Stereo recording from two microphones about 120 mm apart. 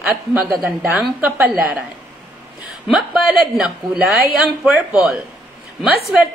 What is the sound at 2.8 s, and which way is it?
A man's voice, centre (ahead or behind).